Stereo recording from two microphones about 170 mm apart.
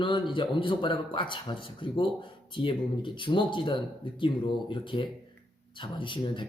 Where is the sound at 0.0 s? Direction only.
30° left (ahead or behind).